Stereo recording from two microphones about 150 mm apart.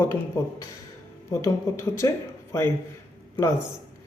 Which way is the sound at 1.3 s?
20° left (ahead or behind).